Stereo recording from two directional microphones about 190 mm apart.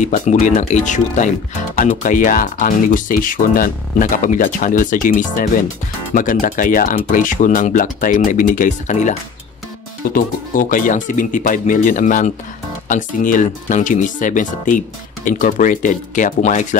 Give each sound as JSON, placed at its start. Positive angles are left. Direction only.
{"t": 0.0, "sound": "speech", "side_deg": 40}
{"t": 10.1, "sound": "speech", "side_deg": 45}